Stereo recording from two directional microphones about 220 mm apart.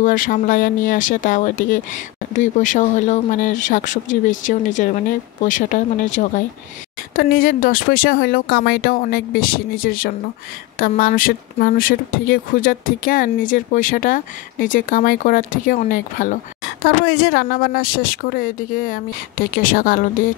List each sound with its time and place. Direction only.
0.0 s speech: 35° left (ahead or behind)